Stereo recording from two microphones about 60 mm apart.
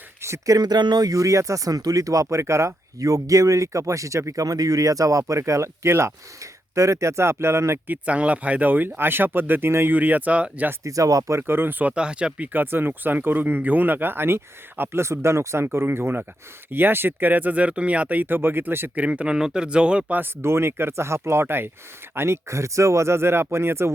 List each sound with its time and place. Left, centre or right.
0.2 s a sound: right
1.0 s speech: right
3.0 s speech: right
7.9 s speech: right
9.9 s speech: right
10.8 s speech: right
11.3 s speech: right
11.9 s speech: centre
12.5 s speech: right
18.9 s speech: right
20.1 s speech: right